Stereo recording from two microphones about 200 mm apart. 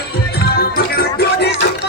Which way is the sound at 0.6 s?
50° left (ahead or behind).